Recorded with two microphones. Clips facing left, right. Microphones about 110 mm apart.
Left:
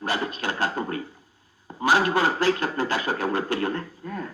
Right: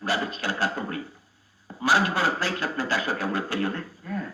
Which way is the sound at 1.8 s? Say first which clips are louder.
Left 2 dB; 55° left (ahead or behind).